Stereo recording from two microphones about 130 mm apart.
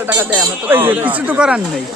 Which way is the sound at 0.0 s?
15° right (ahead or behind).